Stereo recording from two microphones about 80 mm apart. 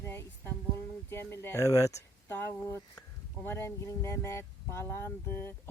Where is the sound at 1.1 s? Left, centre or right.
Left.